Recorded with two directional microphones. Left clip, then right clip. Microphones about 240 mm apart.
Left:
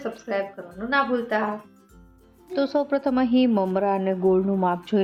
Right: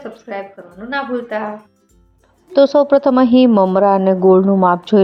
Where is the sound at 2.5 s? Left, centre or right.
Right.